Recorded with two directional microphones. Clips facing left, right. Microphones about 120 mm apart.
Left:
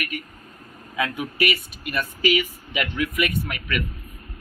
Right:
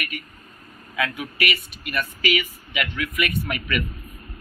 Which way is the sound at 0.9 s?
30° left (ahead or behind).